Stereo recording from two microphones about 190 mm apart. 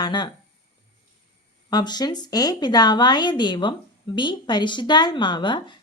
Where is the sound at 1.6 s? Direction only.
20° left (ahead or behind).